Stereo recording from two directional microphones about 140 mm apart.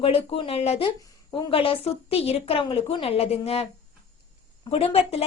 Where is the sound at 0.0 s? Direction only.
45° left (ahead or behind).